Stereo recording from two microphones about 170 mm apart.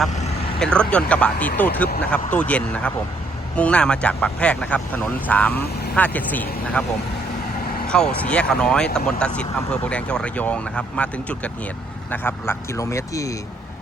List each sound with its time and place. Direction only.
0.6 s speech: 5° left (ahead or behind)
7.9 s speech: 5° left (ahead or behind)